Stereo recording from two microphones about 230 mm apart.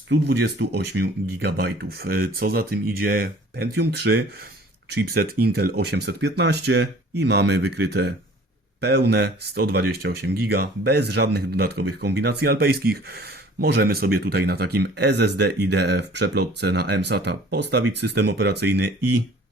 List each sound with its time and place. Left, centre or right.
0.1 s speech: right